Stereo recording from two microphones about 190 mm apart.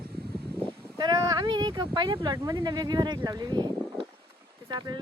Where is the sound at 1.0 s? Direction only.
20° right (ahead or behind).